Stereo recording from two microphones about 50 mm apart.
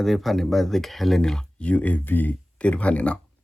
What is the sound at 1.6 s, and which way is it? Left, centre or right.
Speech, left.